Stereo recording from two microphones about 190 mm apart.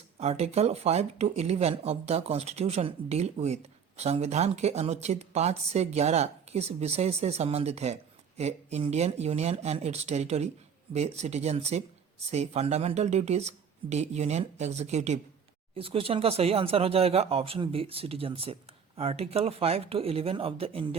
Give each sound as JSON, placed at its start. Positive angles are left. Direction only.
{"t": 0.2, "sound": "speech", "side_deg": -35}